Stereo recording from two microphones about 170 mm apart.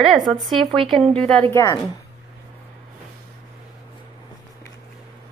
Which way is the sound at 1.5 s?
15° left (ahead or behind).